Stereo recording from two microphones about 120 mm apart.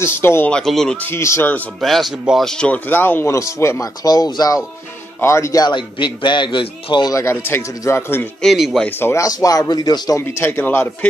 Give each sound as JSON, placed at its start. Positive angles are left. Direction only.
{"t": 0.0, "sound": "a man's voice", "side_deg": 20}
{"t": 0.5, "sound": "speech", "side_deg": 5}
{"t": 1.0, "sound": "a man's voice", "side_deg": 20}
{"t": 1.8, "sound": "a man's voice", "side_deg": 0}
{"t": 8.4, "sound": "speech", "side_deg": 0}
{"t": 8.8, "sound": "a man's voice", "side_deg": 20}